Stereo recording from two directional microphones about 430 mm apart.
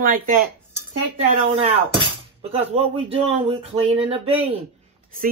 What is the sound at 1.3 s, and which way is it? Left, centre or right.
Speech, centre.